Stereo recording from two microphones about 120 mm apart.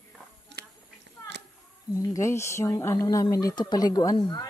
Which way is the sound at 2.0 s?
25° left (ahead or behind).